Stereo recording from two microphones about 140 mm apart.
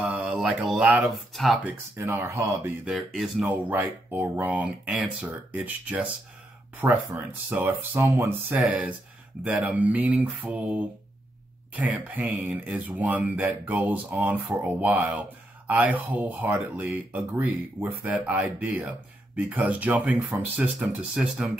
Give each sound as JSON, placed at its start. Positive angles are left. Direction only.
{"t": 0.4, "sound": "speech", "side_deg": -5}
{"t": 1.3, "sound": "speech", "side_deg": 0}
{"t": 1.6, "sound": "speech", "side_deg": -20}
{"t": 2.8, "sound": "speech", "side_deg": -5}